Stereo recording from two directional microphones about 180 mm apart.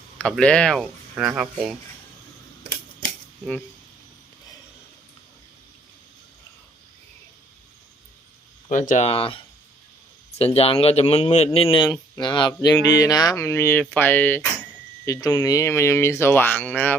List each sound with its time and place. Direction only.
0.2 s speech: 5° left (ahead or behind)
8.7 s speech: 45° left (ahead or behind); by 16.9 s 10° left (ahead or behind)